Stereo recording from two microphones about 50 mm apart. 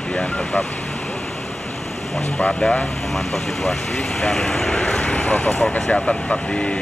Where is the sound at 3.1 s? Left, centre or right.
Centre.